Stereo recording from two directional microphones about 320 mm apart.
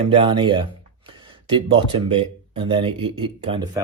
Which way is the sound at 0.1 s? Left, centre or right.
Centre.